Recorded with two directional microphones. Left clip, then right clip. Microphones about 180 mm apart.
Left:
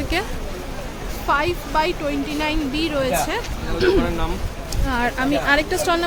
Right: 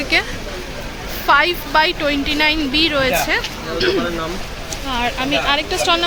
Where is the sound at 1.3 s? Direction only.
Centre (ahead or behind).